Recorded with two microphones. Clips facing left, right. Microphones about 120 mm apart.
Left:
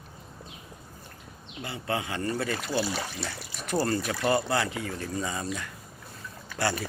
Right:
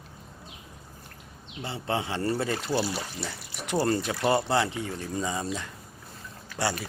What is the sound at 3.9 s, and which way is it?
Speech, 20° right (ahead or behind).